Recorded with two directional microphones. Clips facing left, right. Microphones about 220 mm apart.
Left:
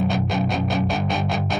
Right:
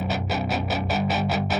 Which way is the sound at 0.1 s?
5° right (ahead or behind).